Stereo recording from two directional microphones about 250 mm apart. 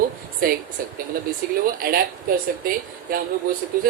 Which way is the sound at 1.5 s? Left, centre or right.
Right.